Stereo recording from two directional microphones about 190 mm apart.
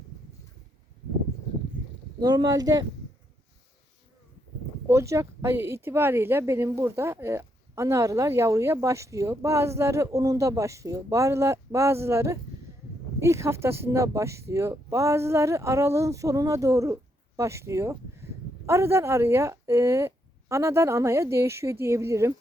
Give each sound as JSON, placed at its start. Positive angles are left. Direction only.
{"t": 2.2, "sound": "speech", "side_deg": -20}
{"t": 4.9, "sound": "speech", "side_deg": -15}